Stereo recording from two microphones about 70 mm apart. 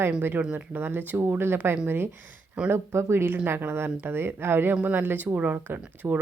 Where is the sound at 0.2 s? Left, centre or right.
Right.